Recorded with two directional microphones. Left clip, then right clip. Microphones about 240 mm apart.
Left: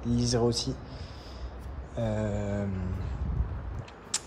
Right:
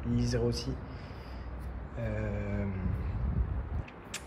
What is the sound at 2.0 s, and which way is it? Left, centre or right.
Speech, centre.